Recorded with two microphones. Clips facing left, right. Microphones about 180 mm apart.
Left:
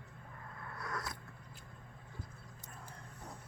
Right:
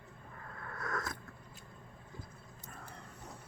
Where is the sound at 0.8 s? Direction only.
45° right (ahead or behind).